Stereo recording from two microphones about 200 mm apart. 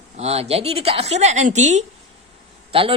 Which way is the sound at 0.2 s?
30° right (ahead or behind).